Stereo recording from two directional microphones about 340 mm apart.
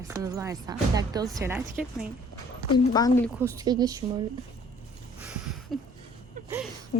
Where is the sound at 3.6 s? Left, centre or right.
Centre.